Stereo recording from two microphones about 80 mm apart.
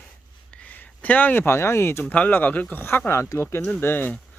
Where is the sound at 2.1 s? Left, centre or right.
Left.